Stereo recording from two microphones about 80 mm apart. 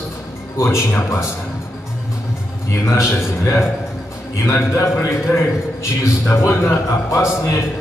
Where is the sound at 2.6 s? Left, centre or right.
Left.